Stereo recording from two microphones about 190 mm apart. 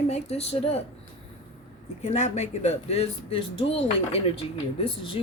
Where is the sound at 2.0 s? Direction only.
35° left (ahead or behind).